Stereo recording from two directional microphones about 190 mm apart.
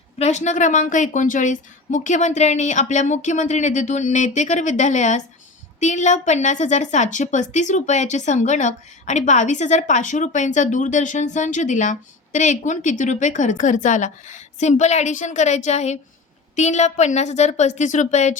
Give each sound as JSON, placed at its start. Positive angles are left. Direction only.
{"t": 0.2, "sound": "a woman's voice", "side_deg": 35}